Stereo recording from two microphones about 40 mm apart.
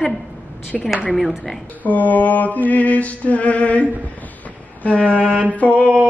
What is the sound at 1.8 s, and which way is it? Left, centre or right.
Mantra, left.